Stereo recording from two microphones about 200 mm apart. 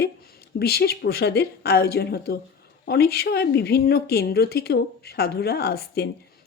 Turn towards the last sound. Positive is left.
turn(degrees=50)  # may be behind; listen again after turning